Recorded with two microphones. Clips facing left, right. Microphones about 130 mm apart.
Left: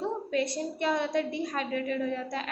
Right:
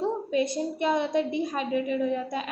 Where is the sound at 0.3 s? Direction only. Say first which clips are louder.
Right 3 dB; 20° right (ahead or behind).